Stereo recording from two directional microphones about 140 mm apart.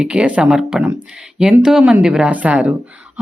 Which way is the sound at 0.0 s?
5° right (ahead or behind).